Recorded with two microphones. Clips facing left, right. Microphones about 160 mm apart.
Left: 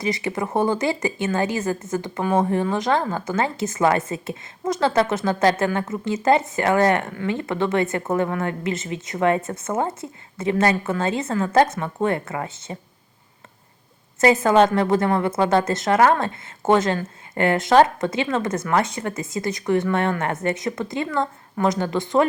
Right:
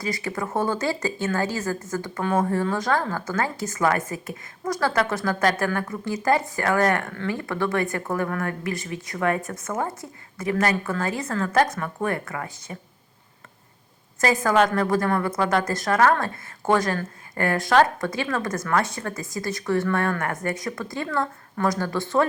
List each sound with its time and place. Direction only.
0.0 s speech: 20° left (ahead or behind)
14.2 s speech: 25° left (ahead or behind)